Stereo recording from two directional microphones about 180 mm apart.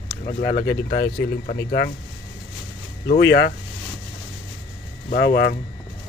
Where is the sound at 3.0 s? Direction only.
60° left (ahead or behind).